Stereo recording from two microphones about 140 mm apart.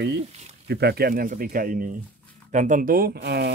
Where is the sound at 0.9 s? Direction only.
90° right.